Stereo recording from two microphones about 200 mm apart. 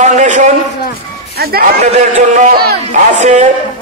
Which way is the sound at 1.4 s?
50° right (ahead or behind).